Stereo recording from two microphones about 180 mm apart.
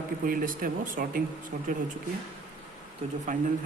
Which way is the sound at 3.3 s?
45° right (ahead or behind).